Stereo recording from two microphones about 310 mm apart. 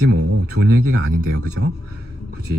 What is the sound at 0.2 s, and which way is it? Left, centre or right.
A man's voice, right.